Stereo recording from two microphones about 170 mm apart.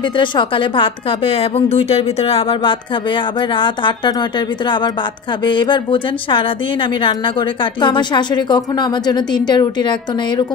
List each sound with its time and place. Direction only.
0.2 s a woman's voice: 30° left (ahead or behind)
5.4 s a woman's voice: 25° left (ahead or behind)